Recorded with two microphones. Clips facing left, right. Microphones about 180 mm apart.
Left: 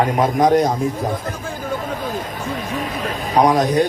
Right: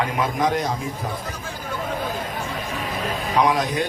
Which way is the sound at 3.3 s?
40° left (ahead or behind).